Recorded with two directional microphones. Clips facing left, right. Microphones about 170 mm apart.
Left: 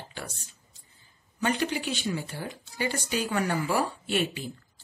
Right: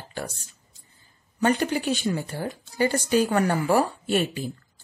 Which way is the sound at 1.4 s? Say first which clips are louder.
Right 5 dB; 45° right (ahead or behind).